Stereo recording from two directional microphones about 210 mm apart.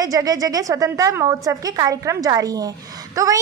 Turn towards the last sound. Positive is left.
turn(degrees=-15)  # may be behind; listen again after turning